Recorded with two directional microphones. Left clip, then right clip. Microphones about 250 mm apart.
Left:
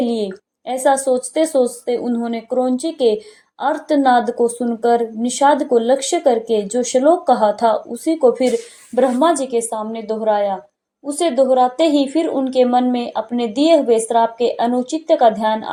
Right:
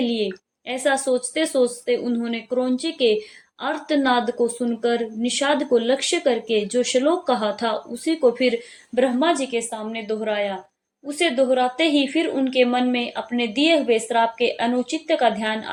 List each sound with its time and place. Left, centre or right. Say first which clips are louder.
0.0 s speech: left 3 dB; centre